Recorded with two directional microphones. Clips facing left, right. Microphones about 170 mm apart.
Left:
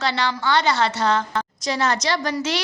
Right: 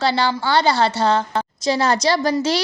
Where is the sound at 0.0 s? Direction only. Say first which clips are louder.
Right 4 dB; 30° right (ahead or behind).